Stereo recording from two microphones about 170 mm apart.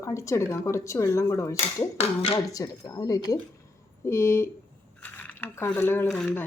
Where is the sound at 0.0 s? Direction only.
15° left (ahead or behind).